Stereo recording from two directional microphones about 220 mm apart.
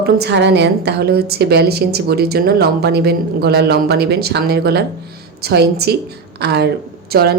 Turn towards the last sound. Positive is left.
turn(degrees=-45)  # may be behind; listen again after turning